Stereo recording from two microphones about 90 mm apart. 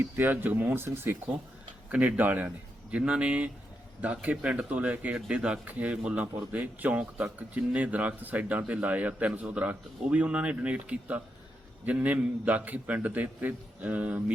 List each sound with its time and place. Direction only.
0.0 s speech: 20° right (ahead or behind)
1.9 s speech: 15° right (ahead or behind)